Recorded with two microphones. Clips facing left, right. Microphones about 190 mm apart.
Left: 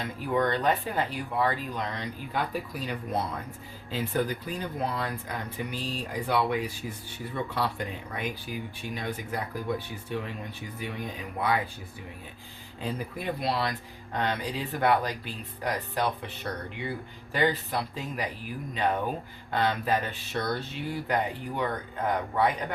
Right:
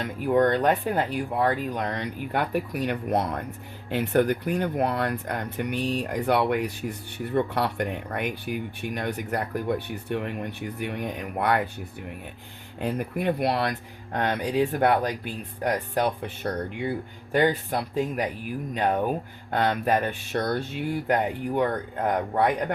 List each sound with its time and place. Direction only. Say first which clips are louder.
0.0 s speech: right 6 dB; 55° right (ahead or behind)
12.8 s speech: right 6 dB; 60° right (ahead or behind)